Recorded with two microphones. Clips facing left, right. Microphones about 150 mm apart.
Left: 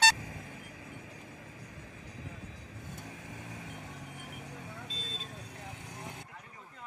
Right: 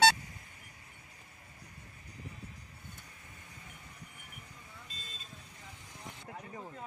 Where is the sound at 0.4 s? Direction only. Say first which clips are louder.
Left 10 dB; 90° left; by 6.2 s 70° left (ahead or behind).